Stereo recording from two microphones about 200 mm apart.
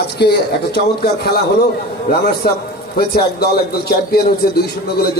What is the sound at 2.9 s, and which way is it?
A man's voice, 50° left (ahead or behind).